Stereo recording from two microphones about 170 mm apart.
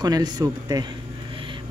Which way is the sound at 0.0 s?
25° right (ahead or behind).